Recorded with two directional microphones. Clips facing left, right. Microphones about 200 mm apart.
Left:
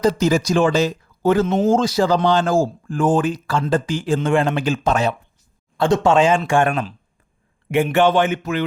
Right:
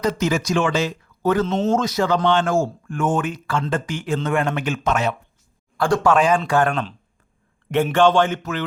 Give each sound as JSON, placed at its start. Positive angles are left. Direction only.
{"t": 0.0, "sound": "speech", "side_deg": 35}
{"t": 7.9, "sound": "speech", "side_deg": 10}